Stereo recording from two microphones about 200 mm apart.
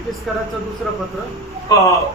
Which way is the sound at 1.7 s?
20° left (ahead or behind).